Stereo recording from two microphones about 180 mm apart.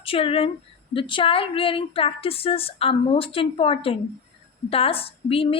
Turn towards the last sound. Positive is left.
turn(degrees=30)  # may be behind; listen again after turning